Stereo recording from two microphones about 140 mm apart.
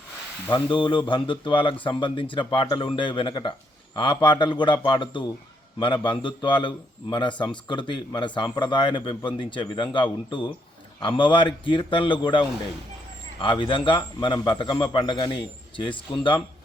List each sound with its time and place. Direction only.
0.5 s a man's voice: 35° left (ahead or behind)
13.4 s a man's voice: 35° left (ahead or behind)